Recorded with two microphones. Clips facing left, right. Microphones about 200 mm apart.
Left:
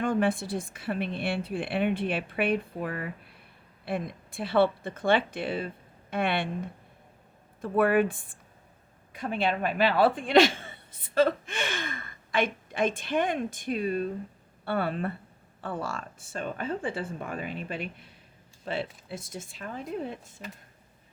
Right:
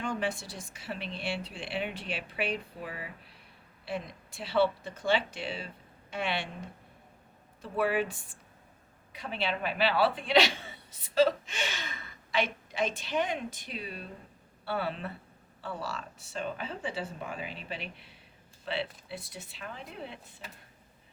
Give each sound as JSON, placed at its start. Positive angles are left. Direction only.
{"t": 0.0, "sound": "a woman's voice", "side_deg": 55}